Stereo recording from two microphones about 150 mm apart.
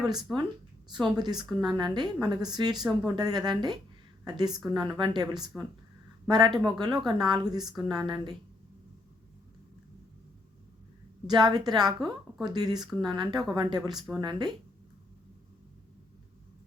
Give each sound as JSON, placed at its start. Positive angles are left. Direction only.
{"t": 0.3, "sound": "speech", "side_deg": -5}
{"t": 0.9, "sound": "a woman's voice", "side_deg": -30}
{"t": 11.3, "sound": "speech", "side_deg": -30}